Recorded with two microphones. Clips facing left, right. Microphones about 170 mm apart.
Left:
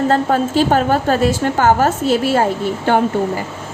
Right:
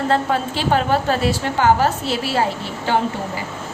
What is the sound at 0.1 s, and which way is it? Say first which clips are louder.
A woman's voice: left 4 dB; 45° left (ahead or behind).